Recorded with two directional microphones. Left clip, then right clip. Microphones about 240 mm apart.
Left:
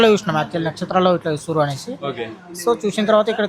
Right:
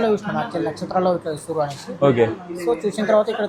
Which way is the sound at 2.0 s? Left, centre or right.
Centre.